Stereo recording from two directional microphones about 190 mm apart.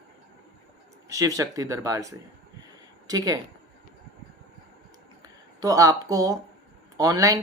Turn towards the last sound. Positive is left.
turn(degrees=-20)  # may be behind; listen again after turning